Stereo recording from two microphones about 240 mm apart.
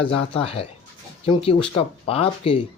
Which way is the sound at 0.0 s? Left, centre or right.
Left.